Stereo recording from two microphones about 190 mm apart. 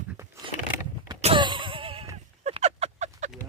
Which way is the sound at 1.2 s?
25° right (ahead or behind).